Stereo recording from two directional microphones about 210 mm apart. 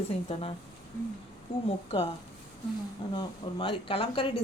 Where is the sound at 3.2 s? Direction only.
25° left (ahead or behind).